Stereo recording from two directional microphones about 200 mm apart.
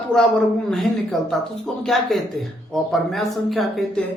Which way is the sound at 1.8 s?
Centre (ahead or behind).